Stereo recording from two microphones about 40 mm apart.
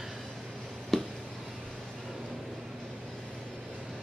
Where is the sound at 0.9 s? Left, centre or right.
Centre.